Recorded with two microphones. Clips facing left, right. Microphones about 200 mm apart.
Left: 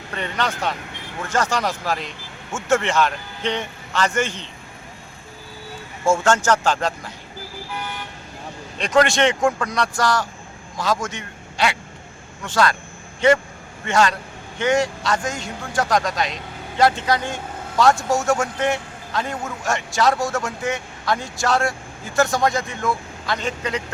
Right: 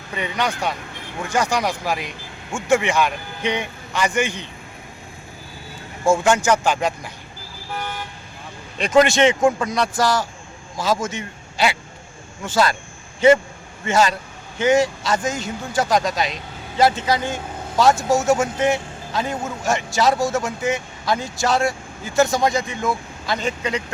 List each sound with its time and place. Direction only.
0.1 s speech: 10° right (ahead or behind)
6.1 s speech: 15° right (ahead or behind)
8.8 s a man's voice: 5° right (ahead or behind)
13.8 s a man's voice: 5° right (ahead or behind)